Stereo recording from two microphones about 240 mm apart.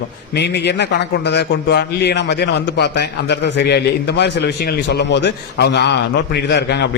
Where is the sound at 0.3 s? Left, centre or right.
Left.